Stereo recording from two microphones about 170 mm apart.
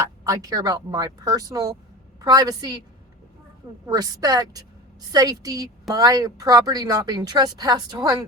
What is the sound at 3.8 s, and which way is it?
Speech, 20° right (ahead or behind).